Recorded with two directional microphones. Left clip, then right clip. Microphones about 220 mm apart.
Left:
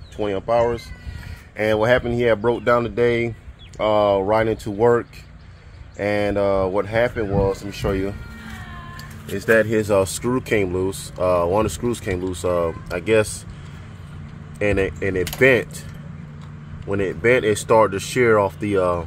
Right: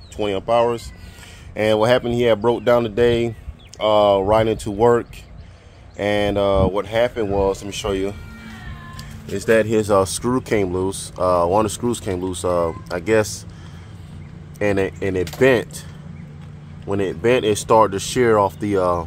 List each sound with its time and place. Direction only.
0.2 s speech: 15° right (ahead or behind)
14.6 s speech: 5° right (ahead or behind)
16.8 s speech: 10° right (ahead or behind)